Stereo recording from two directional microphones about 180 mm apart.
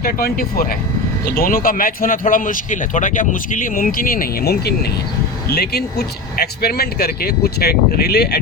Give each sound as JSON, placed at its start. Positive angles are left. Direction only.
{"t": 0.0, "sound": "speech", "side_deg": 55}